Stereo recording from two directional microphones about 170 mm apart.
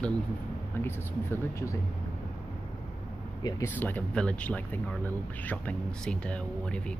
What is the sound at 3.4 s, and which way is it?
Speech, 15° left (ahead or behind).